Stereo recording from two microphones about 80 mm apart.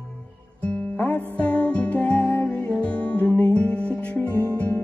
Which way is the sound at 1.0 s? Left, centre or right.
Centre.